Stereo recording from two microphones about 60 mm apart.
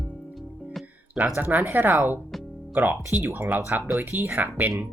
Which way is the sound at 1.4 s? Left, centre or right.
Right.